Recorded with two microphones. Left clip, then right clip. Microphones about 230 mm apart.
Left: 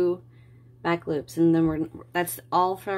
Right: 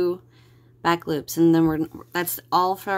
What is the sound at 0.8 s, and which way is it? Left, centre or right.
Speech, right.